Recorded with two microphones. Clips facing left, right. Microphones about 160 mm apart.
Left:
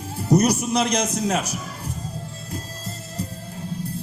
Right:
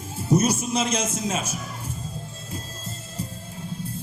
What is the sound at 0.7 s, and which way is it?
Speech, 70° left (ahead or behind).